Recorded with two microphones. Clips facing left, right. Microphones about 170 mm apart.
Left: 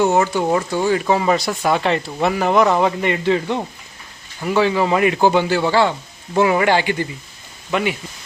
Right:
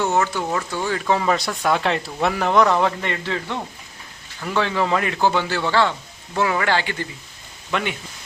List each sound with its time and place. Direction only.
0.0 s a man's voice: 15° left (ahead or behind)